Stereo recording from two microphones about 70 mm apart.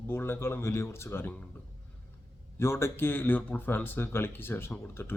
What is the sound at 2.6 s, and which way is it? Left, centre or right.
Speech, left.